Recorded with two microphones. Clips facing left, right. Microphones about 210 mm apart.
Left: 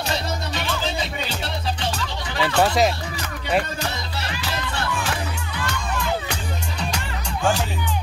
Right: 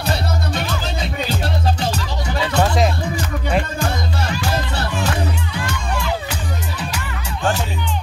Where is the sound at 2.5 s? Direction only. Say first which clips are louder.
Even; 5° left (ahead or behind).